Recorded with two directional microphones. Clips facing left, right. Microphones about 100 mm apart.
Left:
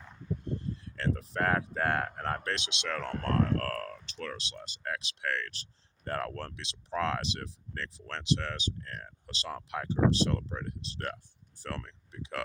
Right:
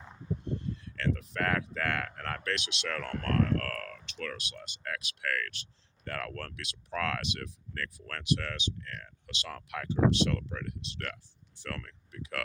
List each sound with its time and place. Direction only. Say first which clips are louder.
0.6 s speech: even; 35° left (ahead or behind)